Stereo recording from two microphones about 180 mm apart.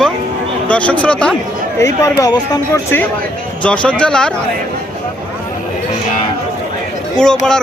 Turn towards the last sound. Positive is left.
turn(degrees=5)  # may be behind; listen again after turning